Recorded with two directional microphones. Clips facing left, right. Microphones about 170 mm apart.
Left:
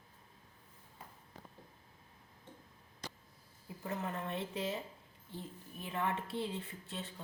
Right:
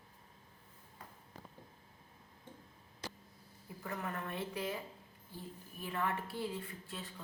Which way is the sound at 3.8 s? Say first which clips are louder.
Left 2 dB; 20° left (ahead or behind).